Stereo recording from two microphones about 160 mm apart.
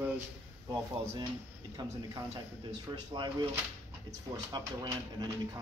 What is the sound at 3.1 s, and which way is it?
Speech, 30° right (ahead or behind).